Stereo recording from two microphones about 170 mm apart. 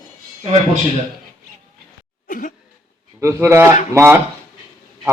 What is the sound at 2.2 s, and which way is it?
Cough, 50° left (ahead or behind).